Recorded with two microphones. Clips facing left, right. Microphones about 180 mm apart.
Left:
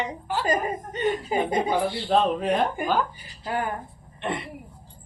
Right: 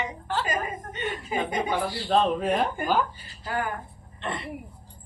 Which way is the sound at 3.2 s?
20° left (ahead or behind).